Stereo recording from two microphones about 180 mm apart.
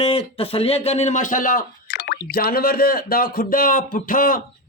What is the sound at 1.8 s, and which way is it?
A man's voice, 70° left (ahead or behind).